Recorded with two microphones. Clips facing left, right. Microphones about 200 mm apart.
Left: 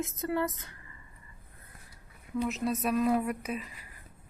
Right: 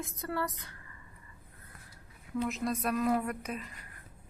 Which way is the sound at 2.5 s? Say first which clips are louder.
Left 3 dB; 5° left (ahead or behind).